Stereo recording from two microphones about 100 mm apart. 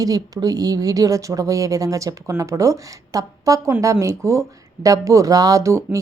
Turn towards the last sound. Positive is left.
turn(degrees=-30)  # may be behind; listen again after turning